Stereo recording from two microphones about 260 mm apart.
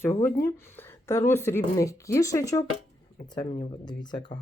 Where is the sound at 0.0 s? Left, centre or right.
Centre.